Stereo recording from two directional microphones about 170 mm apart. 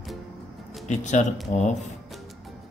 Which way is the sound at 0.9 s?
45° left (ahead or behind).